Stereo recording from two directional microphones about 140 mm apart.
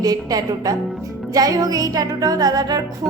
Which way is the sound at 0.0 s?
25° right (ahead or behind).